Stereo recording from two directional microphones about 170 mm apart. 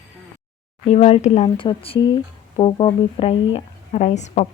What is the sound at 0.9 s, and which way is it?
Speech, 40° left (ahead or behind).